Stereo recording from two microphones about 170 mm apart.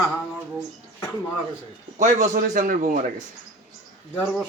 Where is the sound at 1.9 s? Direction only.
45° right (ahead or behind).